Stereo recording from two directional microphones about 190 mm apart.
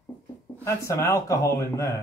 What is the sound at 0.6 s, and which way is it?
Speech, 15° left (ahead or behind).